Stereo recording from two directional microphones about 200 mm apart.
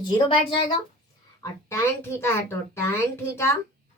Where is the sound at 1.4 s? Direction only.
10° left (ahead or behind).